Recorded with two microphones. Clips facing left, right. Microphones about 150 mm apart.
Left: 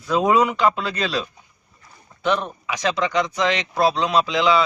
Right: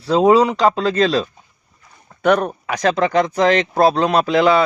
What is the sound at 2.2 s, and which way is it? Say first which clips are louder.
Speech: right 7 dB; 55° right (ahead or behind).